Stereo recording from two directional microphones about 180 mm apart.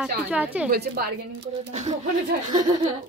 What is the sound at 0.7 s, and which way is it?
Speech, 60° right (ahead or behind).